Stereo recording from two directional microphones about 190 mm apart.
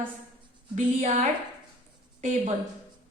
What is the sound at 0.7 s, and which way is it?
A woman's voice, 35° right (ahead or behind).